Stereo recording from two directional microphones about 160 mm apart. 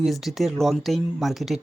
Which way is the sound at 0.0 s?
Centre (ahead or behind).